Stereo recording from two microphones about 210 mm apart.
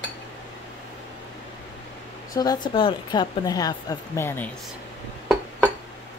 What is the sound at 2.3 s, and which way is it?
Speech, 20° left (ahead or behind).